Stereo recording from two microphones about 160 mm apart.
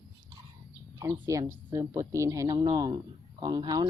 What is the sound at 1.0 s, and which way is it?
Speech, 20° right (ahead or behind).